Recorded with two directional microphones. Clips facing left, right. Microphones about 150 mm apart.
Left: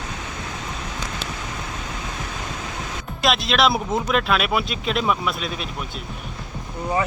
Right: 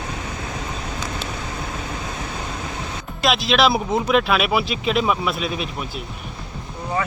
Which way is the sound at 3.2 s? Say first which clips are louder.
Right 2 dB; centre (ahead or behind).